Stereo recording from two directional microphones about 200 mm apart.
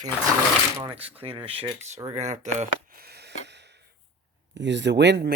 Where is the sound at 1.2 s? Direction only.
30° right (ahead or behind).